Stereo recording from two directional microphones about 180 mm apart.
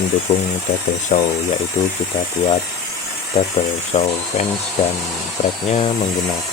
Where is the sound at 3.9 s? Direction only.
40° left (ahead or behind).